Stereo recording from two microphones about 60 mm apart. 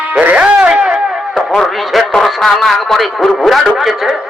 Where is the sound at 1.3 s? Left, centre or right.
Centre.